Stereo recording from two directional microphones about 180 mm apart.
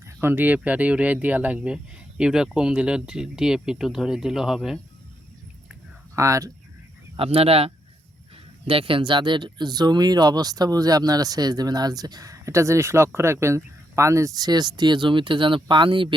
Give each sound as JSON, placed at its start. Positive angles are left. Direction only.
{"t": 0.2, "sound": "speech", "side_deg": -10}
{"t": 6.1, "sound": "speech", "side_deg": -15}
{"t": 7.2, "sound": "speech", "side_deg": -35}